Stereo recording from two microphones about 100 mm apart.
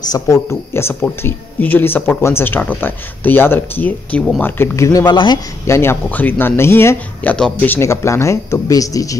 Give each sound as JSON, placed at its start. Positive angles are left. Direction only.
{"t": 0.1, "sound": "speech", "side_deg": 30}
{"t": 5.0, "sound": "speech", "side_deg": 50}
{"t": 5.7, "sound": "speech", "side_deg": 25}